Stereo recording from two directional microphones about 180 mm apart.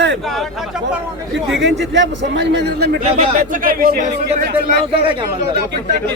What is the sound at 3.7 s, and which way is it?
Speech, 55° right (ahead or behind).